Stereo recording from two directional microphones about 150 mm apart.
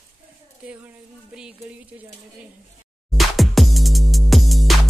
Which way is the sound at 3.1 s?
Centre (ahead or behind).